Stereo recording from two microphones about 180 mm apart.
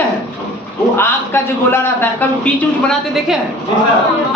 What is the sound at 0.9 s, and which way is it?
A man's voice, 10° left (ahead or behind).